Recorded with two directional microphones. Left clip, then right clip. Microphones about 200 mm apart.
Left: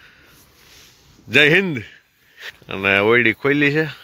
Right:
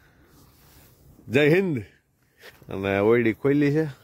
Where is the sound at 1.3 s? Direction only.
5° right (ahead or behind).